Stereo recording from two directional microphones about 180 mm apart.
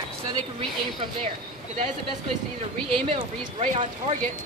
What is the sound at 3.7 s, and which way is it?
Speech, 40° right (ahead or behind).